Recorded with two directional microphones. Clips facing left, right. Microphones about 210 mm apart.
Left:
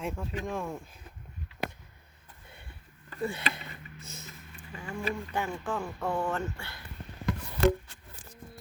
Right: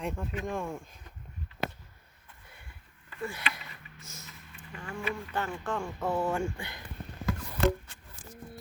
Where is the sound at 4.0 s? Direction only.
60° left (ahead or behind).